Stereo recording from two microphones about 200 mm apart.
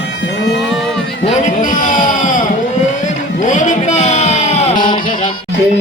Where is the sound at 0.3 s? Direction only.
60° left (ahead or behind).